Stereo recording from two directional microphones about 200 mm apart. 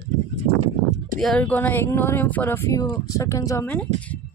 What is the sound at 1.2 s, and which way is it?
Speech, 5° left (ahead or behind).